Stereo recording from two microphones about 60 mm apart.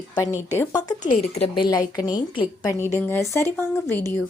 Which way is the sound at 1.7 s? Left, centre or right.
Left.